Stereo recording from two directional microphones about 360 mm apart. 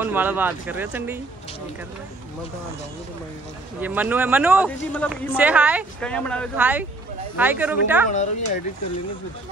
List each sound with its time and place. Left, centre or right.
0.0 s a man's voice: centre
3.8 s a man's voice: centre
8.1 s speech: centre